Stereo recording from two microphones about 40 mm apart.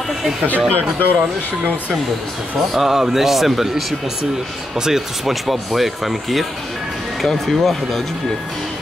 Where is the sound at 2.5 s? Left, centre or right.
Centre.